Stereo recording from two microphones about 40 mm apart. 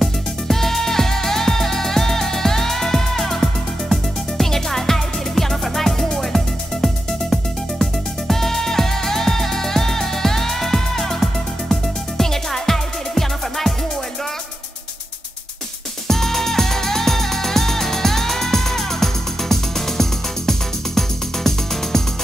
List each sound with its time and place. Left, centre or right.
0.0 s music: centre
16.1 s music: centre